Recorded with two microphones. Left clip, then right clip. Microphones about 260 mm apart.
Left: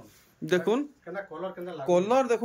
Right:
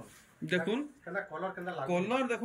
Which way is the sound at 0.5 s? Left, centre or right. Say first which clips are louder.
Left 7 dB; centre.